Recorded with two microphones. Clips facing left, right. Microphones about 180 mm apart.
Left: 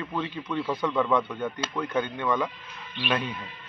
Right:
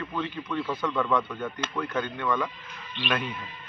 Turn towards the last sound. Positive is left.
turn(degrees=10)  # may be behind; listen again after turning